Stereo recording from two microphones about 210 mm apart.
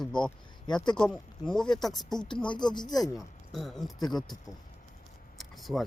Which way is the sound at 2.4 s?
20° left (ahead or behind).